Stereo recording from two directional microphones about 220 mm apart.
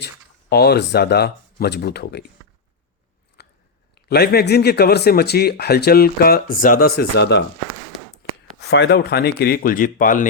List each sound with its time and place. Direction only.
0.5 s speech: 45° left (ahead or behind)
3.4 s biting: 50° left (ahead or behind)
3.9 s speech: 45° left (ahead or behind)
8.7 s speech: 50° left (ahead or behind)